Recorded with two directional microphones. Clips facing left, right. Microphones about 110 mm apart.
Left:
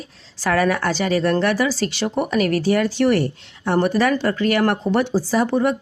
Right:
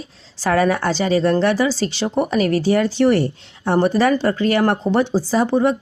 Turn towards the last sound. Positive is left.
turn(degrees=-25)  # may be behind; listen again after turning